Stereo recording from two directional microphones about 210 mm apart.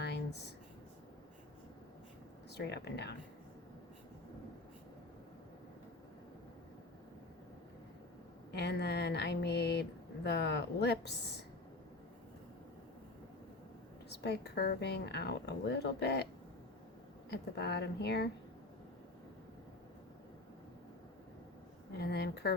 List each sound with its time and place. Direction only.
2.6 s speech: 50° left (ahead or behind)
8.5 s speech: 55° left (ahead or behind)
14.1 s speech: 50° left (ahead or behind)
17.3 s speech: 55° left (ahead or behind)
21.9 s speech: 50° left (ahead or behind)